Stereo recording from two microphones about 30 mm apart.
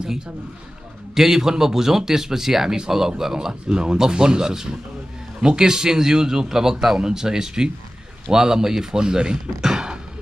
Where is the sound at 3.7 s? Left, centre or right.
Right.